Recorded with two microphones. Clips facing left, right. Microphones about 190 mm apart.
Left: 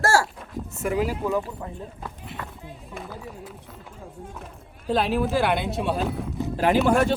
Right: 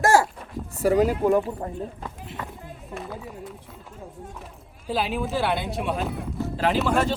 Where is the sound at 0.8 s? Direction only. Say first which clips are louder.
Right 5 dB; 35° right (ahead or behind).